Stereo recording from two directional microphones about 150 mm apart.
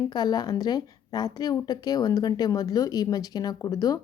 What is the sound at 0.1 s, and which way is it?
A woman's voice, 25° left (ahead or behind).